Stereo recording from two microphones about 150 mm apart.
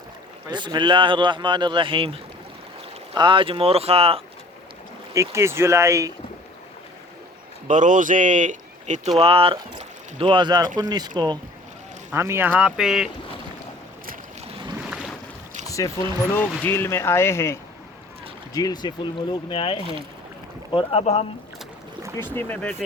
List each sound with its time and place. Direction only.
0.5 s speech: 30° right (ahead or behind)
3.2 s speech: 35° right (ahead or behind)
5.1 s speech: 20° right (ahead or behind)
7.7 s speech: 60° right (ahead or behind); by 11.3 s 30° right (ahead or behind)
12.1 s speech: 15° right (ahead or behind)
14.4 s boat: 30° right (ahead or behind)
14.8 s boat: 5° right (ahead or behind)
15.6 s speech: 20° left (ahead or behind); by 21.2 s 40° left (ahead or behind)
22.1 s speech: 15° left (ahead or behind)